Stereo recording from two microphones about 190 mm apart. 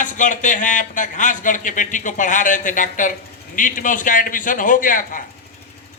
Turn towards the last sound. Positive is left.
turn(degrees=45)  # may be behind; listen again after turning